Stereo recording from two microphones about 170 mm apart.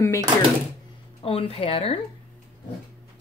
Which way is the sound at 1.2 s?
35° left (ahead or behind).